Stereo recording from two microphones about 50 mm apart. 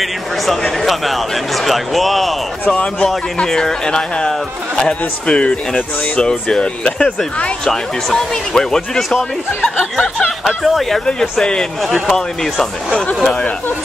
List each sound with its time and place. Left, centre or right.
0.0 s speech: centre
2.7 s a man's voice: centre
7.6 s a man's voice: centre
11.1 s a man's voice: centre